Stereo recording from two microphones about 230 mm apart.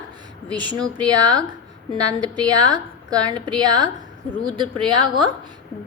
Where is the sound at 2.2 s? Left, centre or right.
Centre.